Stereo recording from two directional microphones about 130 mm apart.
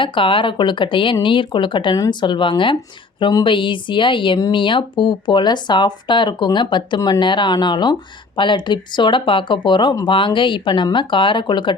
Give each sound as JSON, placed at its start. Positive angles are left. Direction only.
{"t": 0.0, "sound": "speech", "side_deg": 40}